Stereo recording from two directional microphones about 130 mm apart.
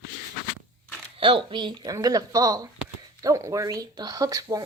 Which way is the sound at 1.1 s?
45° right (ahead or behind).